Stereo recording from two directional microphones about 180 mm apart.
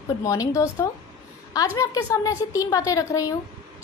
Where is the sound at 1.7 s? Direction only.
15° left (ahead or behind).